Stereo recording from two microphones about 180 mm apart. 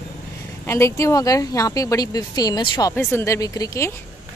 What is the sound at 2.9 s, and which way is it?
A woman's voice, 15° left (ahead or behind).